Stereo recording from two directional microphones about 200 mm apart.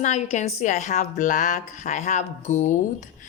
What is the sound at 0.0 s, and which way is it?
A woman's voice, 35° left (ahead or behind).